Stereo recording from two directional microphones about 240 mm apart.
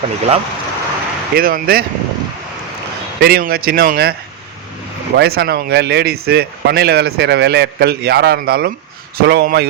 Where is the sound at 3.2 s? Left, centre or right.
Right.